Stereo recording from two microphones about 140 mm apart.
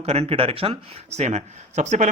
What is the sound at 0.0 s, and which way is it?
Speech, 45° right (ahead or behind).